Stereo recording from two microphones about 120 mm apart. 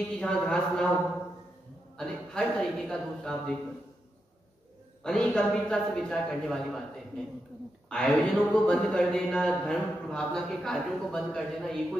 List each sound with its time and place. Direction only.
0.2 s a man's voice: 5° left (ahead or behind)
2.0 s a man's voice: 5° left (ahead or behind)
5.0 s a man's voice: 5° left (ahead or behind)
7.9 s a man's voice: 5° left (ahead or behind)